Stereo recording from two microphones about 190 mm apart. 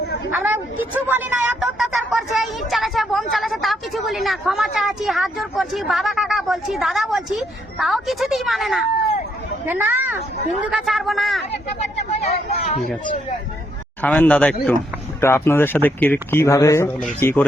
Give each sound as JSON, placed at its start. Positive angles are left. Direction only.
{"t": 0.3, "sound": "a woman's voice", "side_deg": -10}
{"t": 12.2, "sound": "speech", "side_deg": 35}
{"t": 14.0, "sound": "speech", "side_deg": 5}